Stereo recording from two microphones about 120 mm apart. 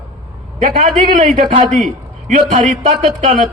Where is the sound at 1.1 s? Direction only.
90° right.